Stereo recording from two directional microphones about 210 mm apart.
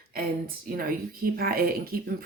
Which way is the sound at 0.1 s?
45° right (ahead or behind).